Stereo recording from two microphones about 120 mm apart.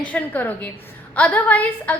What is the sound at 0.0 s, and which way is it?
A woman's voice, 10° left (ahead or behind).